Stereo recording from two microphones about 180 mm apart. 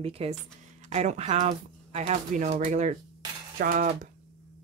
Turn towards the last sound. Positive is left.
turn(degrees=-50)  # may be behind; listen again after turning